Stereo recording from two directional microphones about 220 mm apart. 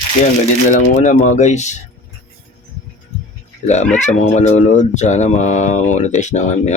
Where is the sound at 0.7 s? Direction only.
35° left (ahead or behind).